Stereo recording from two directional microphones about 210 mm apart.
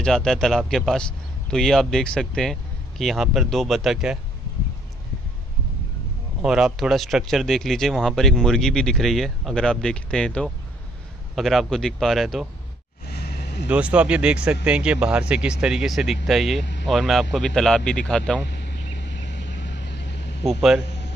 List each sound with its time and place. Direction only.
0.0 s speech: centre (ahead or behind)
6.4 s speech: 5° right (ahead or behind)
13.7 s speech: 5° right (ahead or behind)
18.7 s vehicle: 55° left (ahead or behind)